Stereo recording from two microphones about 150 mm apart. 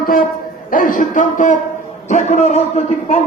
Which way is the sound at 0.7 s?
65° left (ahead or behind).